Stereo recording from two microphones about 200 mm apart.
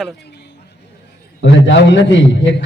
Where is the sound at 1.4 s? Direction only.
60° left (ahead or behind).